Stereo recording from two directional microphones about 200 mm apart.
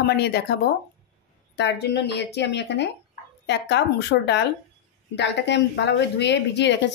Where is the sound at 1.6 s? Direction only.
55° left (ahead or behind).